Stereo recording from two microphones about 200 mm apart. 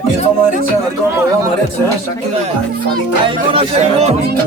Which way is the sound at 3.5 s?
30° right (ahead or behind).